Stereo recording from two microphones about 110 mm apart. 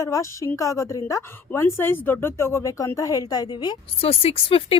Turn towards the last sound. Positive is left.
turn(degrees=60)  # may be behind; listen again after turning